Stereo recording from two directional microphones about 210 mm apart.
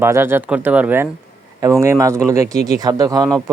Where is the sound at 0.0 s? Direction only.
10° right (ahead or behind).